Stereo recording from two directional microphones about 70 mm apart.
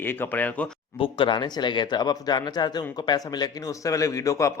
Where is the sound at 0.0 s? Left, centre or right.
Left.